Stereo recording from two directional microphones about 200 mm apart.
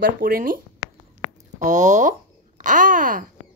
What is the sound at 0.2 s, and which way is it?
Speech, 45° right (ahead or behind).